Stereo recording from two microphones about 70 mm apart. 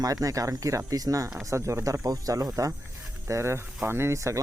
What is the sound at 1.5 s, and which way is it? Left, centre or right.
Speech, right.